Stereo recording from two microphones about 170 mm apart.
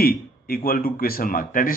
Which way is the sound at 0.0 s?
60° left (ahead or behind).